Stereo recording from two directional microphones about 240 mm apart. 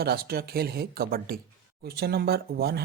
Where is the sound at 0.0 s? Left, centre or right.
Right.